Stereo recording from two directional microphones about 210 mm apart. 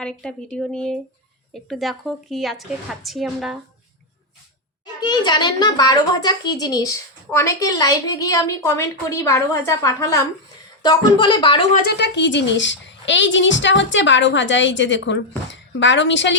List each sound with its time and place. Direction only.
0.0 s a woman's voice: 5° left (ahead or behind)
4.9 s a child's voice: 20° left (ahead or behind)
11.9 s a woman's voice: 55° left (ahead or behind)